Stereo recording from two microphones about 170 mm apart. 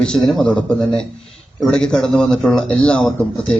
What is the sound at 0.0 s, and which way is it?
Speech, 5° left (ahead or behind).